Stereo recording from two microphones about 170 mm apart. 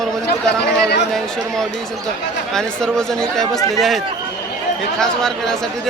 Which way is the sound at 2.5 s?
5° left (ahead or behind).